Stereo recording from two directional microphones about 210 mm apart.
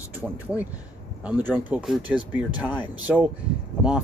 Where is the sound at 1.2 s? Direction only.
10° right (ahead or behind).